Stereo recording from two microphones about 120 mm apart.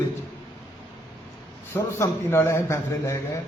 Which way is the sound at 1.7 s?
20° left (ahead or behind).